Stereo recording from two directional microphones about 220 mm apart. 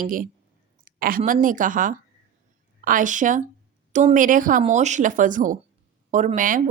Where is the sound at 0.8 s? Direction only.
40° right (ahead or behind).